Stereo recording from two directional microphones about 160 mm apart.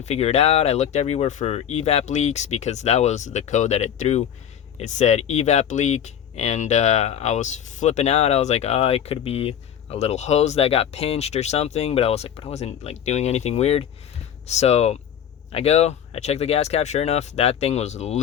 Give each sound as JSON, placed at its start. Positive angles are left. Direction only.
{"t": 0.0, "sound": "speech", "side_deg": 40}